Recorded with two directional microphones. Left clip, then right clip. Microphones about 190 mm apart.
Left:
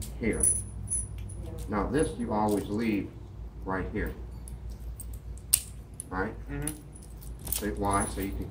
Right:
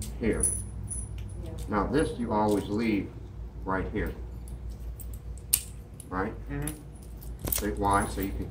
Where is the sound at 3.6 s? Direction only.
15° left (ahead or behind).